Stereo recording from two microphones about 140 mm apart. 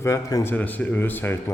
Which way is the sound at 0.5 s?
10° left (ahead or behind).